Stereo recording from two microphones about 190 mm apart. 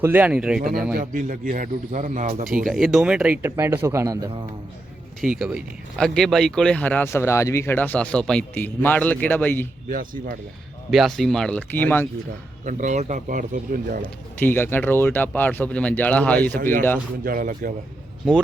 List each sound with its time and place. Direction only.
0.0 s speech: 10° right (ahead or behind)
0.9 s a man's voice: 45° right (ahead or behind)
2.6 s speech: centre (ahead or behind); by 4.4 s 20° right (ahead or behind)
5.2 s speech: 5° right (ahead or behind)
9.9 s a man's voice: 45° right (ahead or behind)
10.9 s speech: centre (ahead or behind)
12.6 s a man's voice: 40° right (ahead or behind)
14.3 s speech: 10° left (ahead or behind)
17.2 s a man's voice: 50° right (ahead or behind)